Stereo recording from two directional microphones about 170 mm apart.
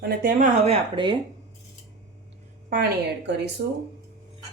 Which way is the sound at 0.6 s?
30° right (ahead or behind).